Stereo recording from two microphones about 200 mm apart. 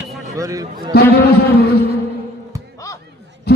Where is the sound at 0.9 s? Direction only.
50° left (ahead or behind).